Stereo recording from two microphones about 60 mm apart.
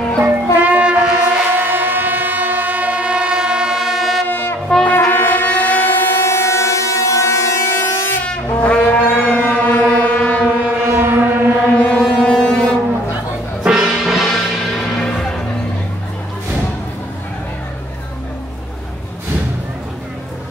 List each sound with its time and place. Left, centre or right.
0.2 s music: right
1.3 s a sound: centre
1.6 s train: right; by 4.2 s centre
4.3 s brass instrument: left
5.1 s civil defense siren: left
7.8 s a sound: left
8.5 s brass instrument: left
9.2 s a sound: left
10.8 s civil defense siren: right
11.7 s ship: left
12.0 s foghorn: centre
13.7 s music: centre